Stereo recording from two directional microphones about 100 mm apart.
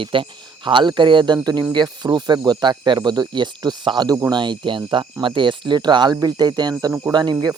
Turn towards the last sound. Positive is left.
turn(degrees=-45)  # may be behind; listen again after turning